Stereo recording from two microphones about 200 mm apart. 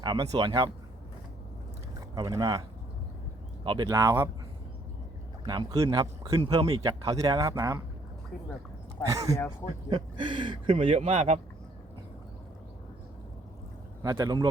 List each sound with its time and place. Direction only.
0.0 s speech: 20° right (ahead or behind)
2.1 s speech: 15° right (ahead or behind)
3.6 s speech: 25° right (ahead or behind)
5.5 s speech: 20° right (ahead or behind)
9.0 s speech: 15° right (ahead or behind); by 11.3 s 35° right (ahead or behind)
14.0 s speech: 15° right (ahead or behind)